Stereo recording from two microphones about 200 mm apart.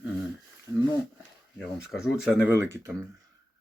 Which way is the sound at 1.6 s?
Centre (ahead or behind).